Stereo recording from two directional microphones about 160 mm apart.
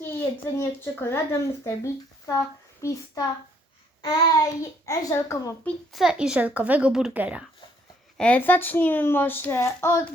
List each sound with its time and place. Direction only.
0.0 s a sound: 15° left (ahead or behind)
0.6 s a child's voice: 15° left (ahead or behind)
4.0 s a child's voice: 25° left (ahead or behind)
5.6 s speech: centre (ahead or behind)
8.2 s speech: 10° left (ahead or behind)